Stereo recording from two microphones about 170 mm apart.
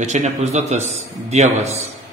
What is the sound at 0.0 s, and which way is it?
A man's voice, 45° right (ahead or behind).